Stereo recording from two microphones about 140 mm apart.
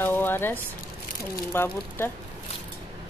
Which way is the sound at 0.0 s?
15° left (ahead or behind).